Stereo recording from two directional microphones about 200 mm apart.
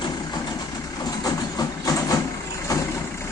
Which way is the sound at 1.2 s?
20° left (ahead or behind).